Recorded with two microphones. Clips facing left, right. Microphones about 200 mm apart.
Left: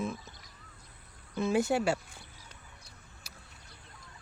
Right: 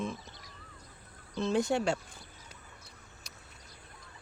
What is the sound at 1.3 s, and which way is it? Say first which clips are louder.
Speech: left 1 dB; 5° left (ahead or behind).